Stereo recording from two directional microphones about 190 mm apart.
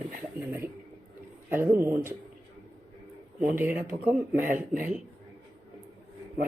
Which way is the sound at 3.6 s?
10° right (ahead or behind).